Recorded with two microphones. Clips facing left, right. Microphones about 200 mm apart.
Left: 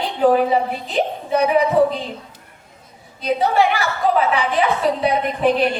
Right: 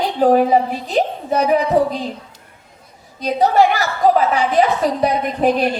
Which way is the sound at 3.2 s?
40° right (ahead or behind).